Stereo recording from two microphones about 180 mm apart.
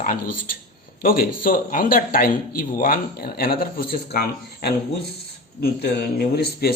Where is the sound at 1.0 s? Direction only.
55° left (ahead or behind).